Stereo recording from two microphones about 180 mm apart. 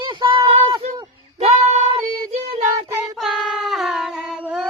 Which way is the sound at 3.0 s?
Centre (ahead or behind).